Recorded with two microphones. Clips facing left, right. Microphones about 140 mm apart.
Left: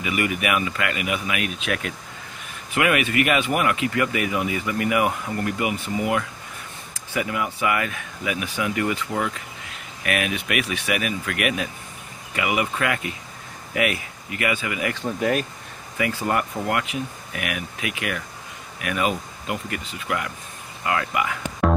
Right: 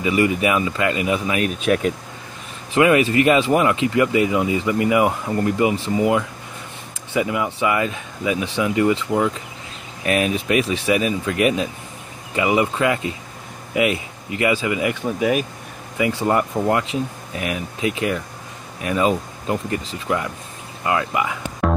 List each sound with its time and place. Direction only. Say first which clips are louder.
0.0 s speech: right 6 dB; 25° right (ahead or behind)
15.1 s speech: right 2 dB; 10° right (ahead or behind)
16.0 s speech: right 5 dB; 25° right (ahead or behind)
21.6 s music: even; centre (ahead or behind)